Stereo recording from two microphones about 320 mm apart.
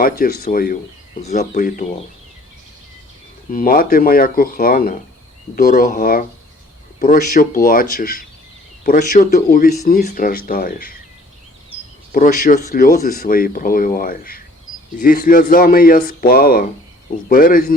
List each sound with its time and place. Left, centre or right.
0.0 s speech: left
3.5 s speech: left
12.1 s speech: left